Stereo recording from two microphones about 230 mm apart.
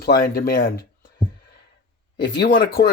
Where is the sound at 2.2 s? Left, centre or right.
Left.